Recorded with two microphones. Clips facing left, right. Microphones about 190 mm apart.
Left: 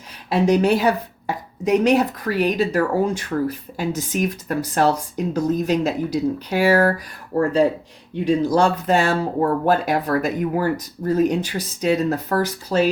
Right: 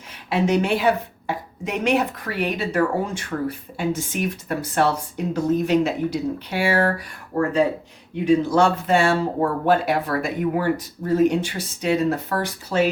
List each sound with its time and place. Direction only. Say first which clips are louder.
0.3 s speech: left 3 dB; 35° left (ahead or behind)
8.1 s speech: even; 35° left (ahead or behind)